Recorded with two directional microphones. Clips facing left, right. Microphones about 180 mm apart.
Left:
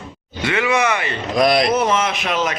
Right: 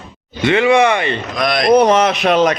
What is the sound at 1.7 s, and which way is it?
Speech, 40° right (ahead or behind).